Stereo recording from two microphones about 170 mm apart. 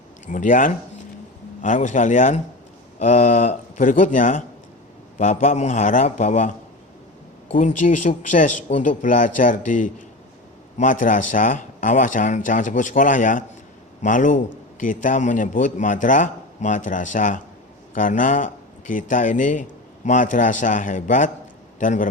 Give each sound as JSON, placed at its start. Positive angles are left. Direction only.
{"t": 0.3, "sound": "a man's voice", "side_deg": 50}
{"t": 7.5, "sound": "a man's voice", "side_deg": 50}